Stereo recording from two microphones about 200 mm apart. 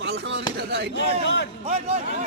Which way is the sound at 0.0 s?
60° right (ahead or behind).